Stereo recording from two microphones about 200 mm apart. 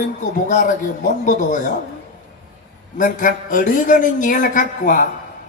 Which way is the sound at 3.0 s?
40° left (ahead or behind).